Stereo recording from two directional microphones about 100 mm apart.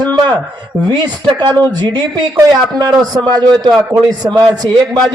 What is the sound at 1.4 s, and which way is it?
Speech, 45° right (ahead or behind).